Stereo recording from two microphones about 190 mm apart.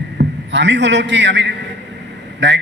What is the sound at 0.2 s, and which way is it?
A man's voice, 65° right (ahead or behind).